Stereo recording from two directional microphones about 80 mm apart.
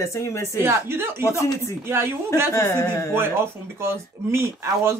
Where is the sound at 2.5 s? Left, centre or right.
Left.